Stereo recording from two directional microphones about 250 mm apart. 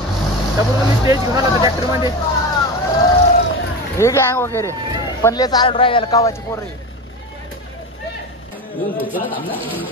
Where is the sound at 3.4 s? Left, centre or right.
Left.